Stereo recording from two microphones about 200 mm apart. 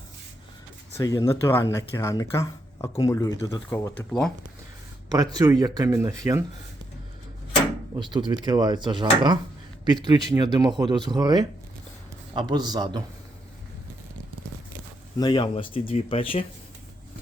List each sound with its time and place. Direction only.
0.9 s speech: 15° left (ahead or behind)
5.0 s speech: 20° right (ahead or behind)
7.9 s speech: 20° right (ahead or behind)
15.2 s speech: 20° left (ahead or behind)